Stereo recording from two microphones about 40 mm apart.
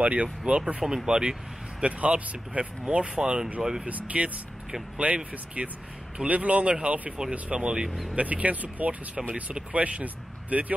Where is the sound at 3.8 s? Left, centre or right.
Right.